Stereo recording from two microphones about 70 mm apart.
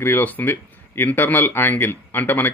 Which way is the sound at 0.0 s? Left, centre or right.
Left.